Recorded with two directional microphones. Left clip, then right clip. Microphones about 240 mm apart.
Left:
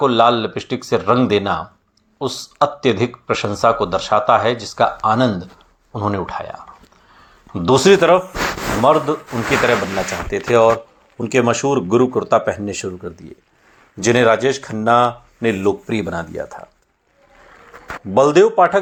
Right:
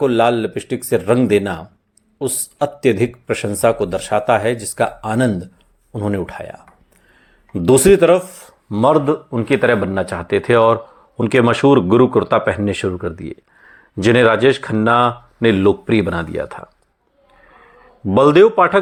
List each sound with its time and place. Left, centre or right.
0.0 s speech: right
18.1 s speech: right